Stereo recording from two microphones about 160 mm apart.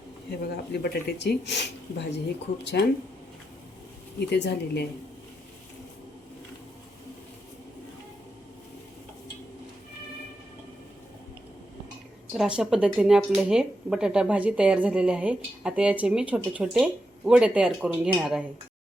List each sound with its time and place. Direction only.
0.3 s speech: 80° left
4.3 s speech: 90° left
12.3 s speech: 5° right (ahead or behind)